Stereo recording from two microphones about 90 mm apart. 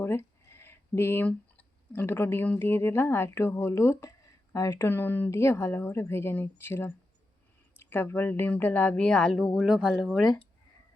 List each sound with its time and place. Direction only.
0.0 s a sound: 30° left (ahead or behind)
1.3 s speech: 15° left (ahead or behind); by 4.9 s 35° left (ahead or behind)
4.9 s speech: 25° left (ahead or behind); by 9.5 s 10° left (ahead or behind)
9.6 s speech: 5° right (ahead or behind)
9.9 s speech: 5° left (ahead or behind)